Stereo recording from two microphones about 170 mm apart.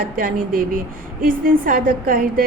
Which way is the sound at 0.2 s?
55° right (ahead or behind).